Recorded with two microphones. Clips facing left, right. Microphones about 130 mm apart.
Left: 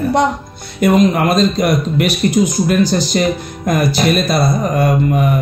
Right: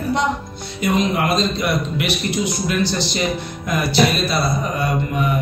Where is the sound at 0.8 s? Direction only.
50° left (ahead or behind).